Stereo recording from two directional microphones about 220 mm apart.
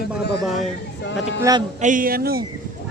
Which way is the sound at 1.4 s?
20° right (ahead or behind).